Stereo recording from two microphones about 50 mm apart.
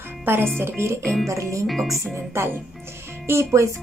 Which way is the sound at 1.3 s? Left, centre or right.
Right.